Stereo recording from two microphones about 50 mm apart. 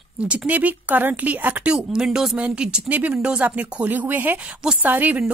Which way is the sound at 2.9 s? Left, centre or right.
Right.